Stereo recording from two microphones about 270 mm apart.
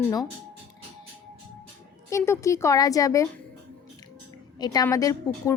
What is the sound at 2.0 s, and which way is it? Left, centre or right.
Speech, centre.